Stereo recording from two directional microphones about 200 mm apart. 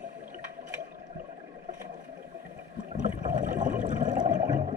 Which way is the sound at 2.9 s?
40° right (ahead or behind).